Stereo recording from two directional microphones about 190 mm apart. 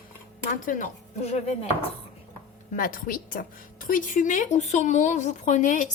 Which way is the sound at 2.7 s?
45° left (ahead or behind).